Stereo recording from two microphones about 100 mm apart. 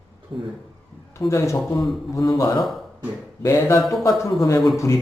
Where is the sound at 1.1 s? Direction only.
30° left (ahead or behind).